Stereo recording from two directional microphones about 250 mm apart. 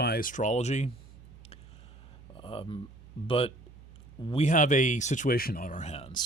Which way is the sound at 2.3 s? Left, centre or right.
Left.